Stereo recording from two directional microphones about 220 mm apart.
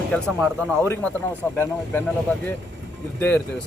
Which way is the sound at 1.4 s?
10° left (ahead or behind).